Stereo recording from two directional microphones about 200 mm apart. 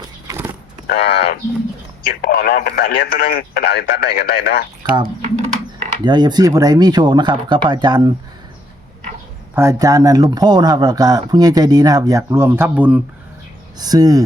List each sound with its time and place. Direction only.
0.0 s vehicle: 15° right (ahead or behind)
0.9 s speech: 55° left (ahead or behind)
5.0 s typing: 40° right (ahead or behind)
6.1 s speech: 20° right (ahead or behind)
9.6 s speech: 15° right (ahead or behind)
13.7 s speech: 20° right (ahead or behind)